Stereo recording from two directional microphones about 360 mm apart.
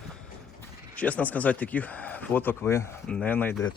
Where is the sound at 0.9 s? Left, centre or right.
Centre.